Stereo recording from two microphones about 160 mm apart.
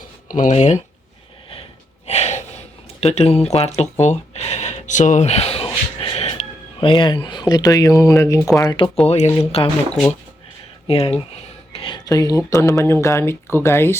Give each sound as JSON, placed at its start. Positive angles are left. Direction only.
{"t": 0.3, "sound": "speech", "side_deg": 50}
{"t": 2.0, "sound": "gasp", "side_deg": 45}
{"t": 4.0, "sound": "speech", "side_deg": 45}
{"t": 9.0, "sound": "speech", "side_deg": 45}
{"t": 11.7, "sound": "whispering", "side_deg": 35}
{"t": 12.0, "sound": "speech", "side_deg": 20}